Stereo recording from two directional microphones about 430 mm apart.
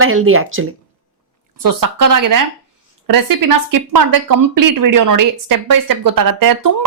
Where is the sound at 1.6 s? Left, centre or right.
Right.